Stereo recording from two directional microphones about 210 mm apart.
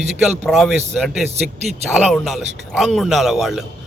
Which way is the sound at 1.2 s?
30° right (ahead or behind).